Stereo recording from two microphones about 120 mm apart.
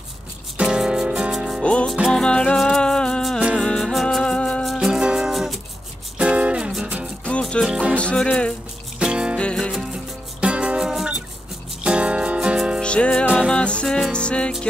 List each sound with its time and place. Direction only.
0.6 s music: 5° right (ahead or behind)
1.6 s music: 10° left (ahead or behind)
2.0 s music: 5° right (ahead or behind)
2.2 s music: 10° left (ahead or behind)
4.7 s music: 5° right (ahead or behind)
7.2 s music: 10° left (ahead or behind)
7.6 s music: centre (ahead or behind)
9.0 s music: 10° right (ahead or behind)
9.4 s music: 5° left (ahead or behind)
10.4 s music: 10° right (ahead or behind)
12.8 s music: 10° left (ahead or behind)